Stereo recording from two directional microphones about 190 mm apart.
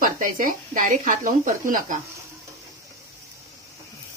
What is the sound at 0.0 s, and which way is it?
Speech, 45° right (ahead or behind).